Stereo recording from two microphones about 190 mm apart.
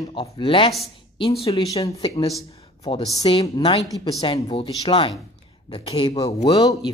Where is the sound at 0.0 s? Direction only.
25° left (ahead or behind).